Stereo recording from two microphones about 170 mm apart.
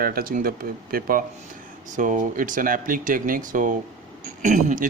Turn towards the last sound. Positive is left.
turn(degrees=-45)  # may be behind; listen again after turning